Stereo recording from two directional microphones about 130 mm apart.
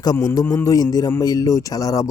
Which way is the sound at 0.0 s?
30° left (ahead or behind).